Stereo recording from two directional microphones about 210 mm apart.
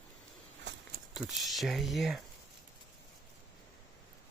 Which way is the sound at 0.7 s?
55° right (ahead or behind).